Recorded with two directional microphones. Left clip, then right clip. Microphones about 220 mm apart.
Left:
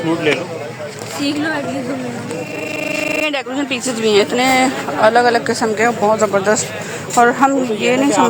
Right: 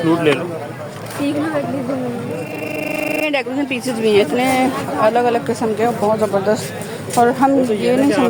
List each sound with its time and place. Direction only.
0.0 s speech: 40° right (ahead or behind)
2.9 s speech: 5° right (ahead or behind)